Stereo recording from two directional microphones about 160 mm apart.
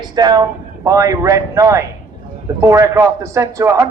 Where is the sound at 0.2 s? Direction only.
25° right (ahead or behind).